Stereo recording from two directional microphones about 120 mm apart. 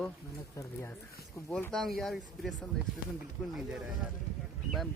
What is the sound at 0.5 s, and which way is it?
Speech, 25° left (ahead or behind).